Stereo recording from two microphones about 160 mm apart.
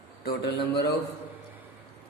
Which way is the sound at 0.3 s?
90° left.